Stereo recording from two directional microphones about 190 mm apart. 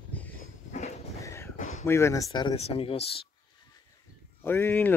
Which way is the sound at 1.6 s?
35° left (ahead or behind).